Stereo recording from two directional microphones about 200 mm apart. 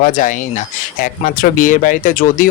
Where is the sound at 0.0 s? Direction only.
45° left (ahead or behind).